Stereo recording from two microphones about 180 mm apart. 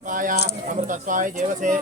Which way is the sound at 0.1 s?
45° right (ahead or behind).